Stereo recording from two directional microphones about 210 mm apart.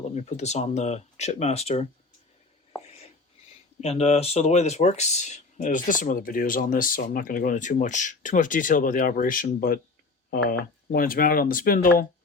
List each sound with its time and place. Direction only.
0.1 s speech: 35° left (ahead or behind)
3.8 s speech: 30° left (ahead or behind)
10.9 s speech: 45° left (ahead or behind)